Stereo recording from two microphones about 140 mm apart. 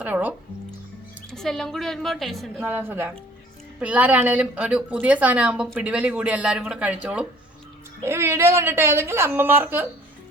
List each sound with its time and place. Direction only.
0.0 s music: 10° right (ahead or behind)
1.3 s a woman's voice: 5° left (ahead or behind)
2.6 s a woman's voice: 15° right (ahead or behind)